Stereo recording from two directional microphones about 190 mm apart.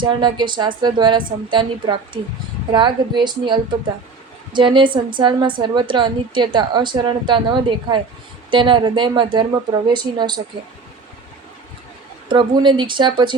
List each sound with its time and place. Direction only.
0.0 s a woman's voice: 25° right (ahead or behind)
12.3 s a woman's voice: 25° right (ahead or behind)